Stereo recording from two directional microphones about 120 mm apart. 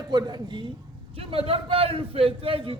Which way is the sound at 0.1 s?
35° right (ahead or behind).